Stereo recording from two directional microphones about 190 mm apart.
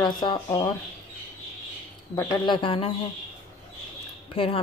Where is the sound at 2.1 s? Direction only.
25° left (ahead or behind).